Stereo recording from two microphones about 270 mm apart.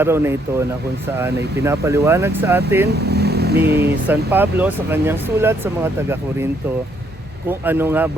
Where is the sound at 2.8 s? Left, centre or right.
Right.